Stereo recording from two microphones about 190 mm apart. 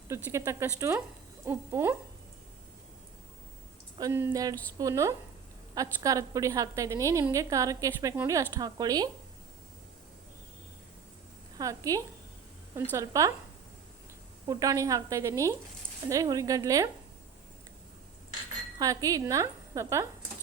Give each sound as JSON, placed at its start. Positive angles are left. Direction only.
{"t": 0.1, "sound": "a woman's voice", "side_deg": -15}
{"t": 3.9, "sound": "a woman's voice", "side_deg": -15}
{"t": 11.5, "sound": "a woman's voice", "side_deg": -20}
{"t": 14.4, "sound": "a woman's voice", "side_deg": -20}
{"t": 18.8, "sound": "a woman's voice", "side_deg": -20}